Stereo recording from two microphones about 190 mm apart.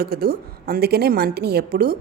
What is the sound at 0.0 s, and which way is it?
A woman's voice, 55° right (ahead or behind).